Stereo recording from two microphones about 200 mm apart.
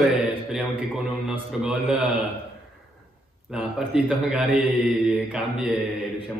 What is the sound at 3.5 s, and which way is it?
A man's voice, 5° right (ahead or behind).